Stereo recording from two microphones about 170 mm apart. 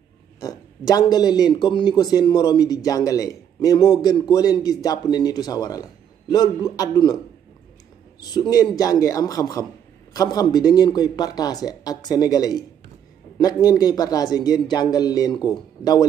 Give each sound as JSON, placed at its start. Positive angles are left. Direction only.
{"t": 0.4, "sound": "speech", "side_deg": 20}
{"t": 8.2, "sound": "speech", "side_deg": 25}